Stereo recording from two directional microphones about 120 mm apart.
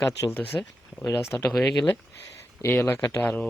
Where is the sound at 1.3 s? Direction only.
20° left (ahead or behind).